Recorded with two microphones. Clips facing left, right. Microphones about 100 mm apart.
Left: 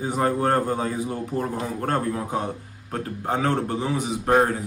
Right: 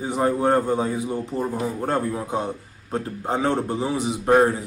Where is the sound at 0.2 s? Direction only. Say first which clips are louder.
Right 2 dB; 10° right (ahead or behind).